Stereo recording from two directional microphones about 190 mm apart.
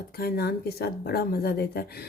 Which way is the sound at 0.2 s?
55° left (ahead or behind).